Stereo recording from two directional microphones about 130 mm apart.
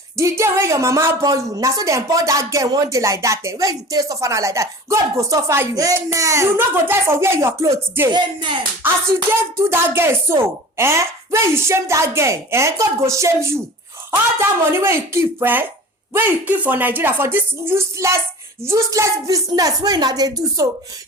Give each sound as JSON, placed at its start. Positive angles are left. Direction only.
{"t": 0.2, "sound": "a woman's voice", "side_deg": -20}
{"t": 8.1, "sound": "speech", "side_deg": -35}
{"t": 9.6, "sound": "a woman's voice", "side_deg": -20}